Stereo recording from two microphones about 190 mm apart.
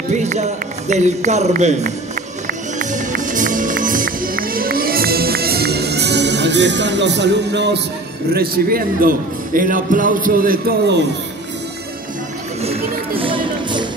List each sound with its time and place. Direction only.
0.1 s a man's voice: 35° right (ahead or behind)
2.4 s music: 40° right (ahead or behind); by 7.8 s 65° right (ahead or behind)
8.3 s a man's voice: 50° right (ahead or behind)
13.2 s music: 25° right (ahead or behind)